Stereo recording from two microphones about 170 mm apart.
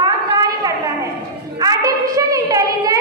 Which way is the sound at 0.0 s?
25° right (ahead or behind).